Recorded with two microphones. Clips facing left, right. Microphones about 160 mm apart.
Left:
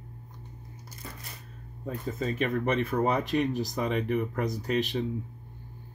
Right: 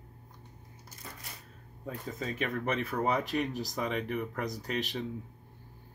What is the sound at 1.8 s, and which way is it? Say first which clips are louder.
Speech: left 5 dB; centre (ahead or behind).